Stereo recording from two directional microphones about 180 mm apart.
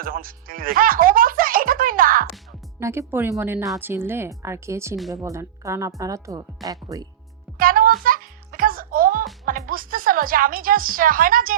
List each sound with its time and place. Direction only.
0.0 s music: 50° right (ahead or behind)
2.8 s speech: 15° right (ahead or behind)
7.6 s music: 50° right (ahead or behind)
9.5 s speech: 50° right (ahead or behind)